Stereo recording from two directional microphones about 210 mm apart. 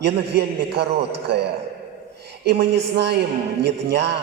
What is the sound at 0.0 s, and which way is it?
A man's voice, 55° right (ahead or behind).